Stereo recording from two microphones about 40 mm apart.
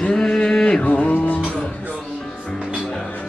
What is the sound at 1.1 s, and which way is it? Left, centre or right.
Music, left.